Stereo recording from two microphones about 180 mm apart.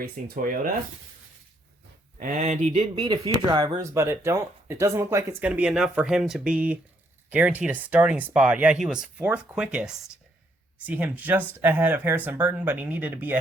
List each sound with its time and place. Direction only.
0.0 s speech: 50° right (ahead or behind)
2.1 s speech: 45° right (ahead or behind)
2.8 s speech: 25° right (ahead or behind); by 13.4 s 10° right (ahead or behind)